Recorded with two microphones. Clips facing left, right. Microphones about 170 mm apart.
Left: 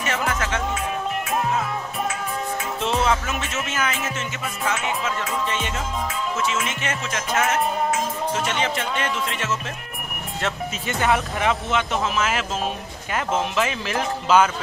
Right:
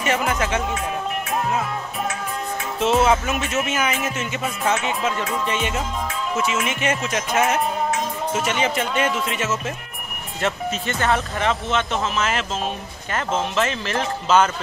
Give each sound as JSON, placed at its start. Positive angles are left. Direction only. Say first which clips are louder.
{"t": 0.0, "sound": "speech", "louder": "right 3 dB", "side_deg": -15}
{"t": 2.8, "sound": "music", "louder": "right 6 dB", "side_deg": -5}
{"t": 3.1, "sound": "speech", "louder": "right 4 dB", "side_deg": -15}
{"t": 4.6, "sound": "music", "louder": "right 3 dB", "side_deg": -20}
{"t": 5.5, "sound": "speech", "louder": "right 3 dB", "side_deg": -15}
{"t": 10.4, "sound": "speech", "louder": "right 4 dB", "side_deg": 5}